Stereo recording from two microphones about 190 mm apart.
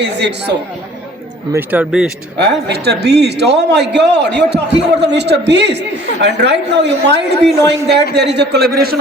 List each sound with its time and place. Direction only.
0.0 s a man's voice: 60° right (ahead or behind)
1.5 s a man's voice: 5° right (ahead or behind)
2.4 s a man's voice: 60° right (ahead or behind)